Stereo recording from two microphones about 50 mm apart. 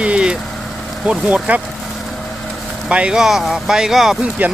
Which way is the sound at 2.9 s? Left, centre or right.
Right.